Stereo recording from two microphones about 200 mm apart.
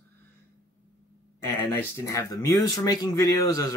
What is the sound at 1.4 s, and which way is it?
Speech, 15° left (ahead or behind).